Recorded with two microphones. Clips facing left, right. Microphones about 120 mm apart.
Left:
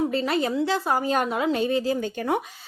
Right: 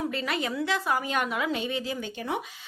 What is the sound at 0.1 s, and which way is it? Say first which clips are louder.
A woman's voice: left 6 dB; 35° left (ahead or behind).